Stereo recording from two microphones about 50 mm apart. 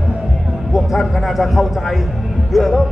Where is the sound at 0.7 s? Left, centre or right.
Centre.